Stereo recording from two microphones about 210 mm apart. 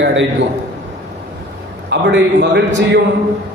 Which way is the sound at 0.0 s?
60° right (ahead or behind).